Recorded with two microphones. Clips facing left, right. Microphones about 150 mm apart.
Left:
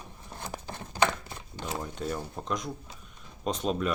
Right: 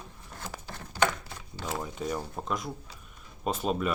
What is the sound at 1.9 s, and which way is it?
Speech, 5° right (ahead or behind).